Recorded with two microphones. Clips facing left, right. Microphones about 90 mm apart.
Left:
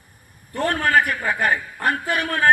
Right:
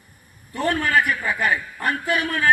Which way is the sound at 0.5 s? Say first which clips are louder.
Left 1 dB; 45° left (ahead or behind).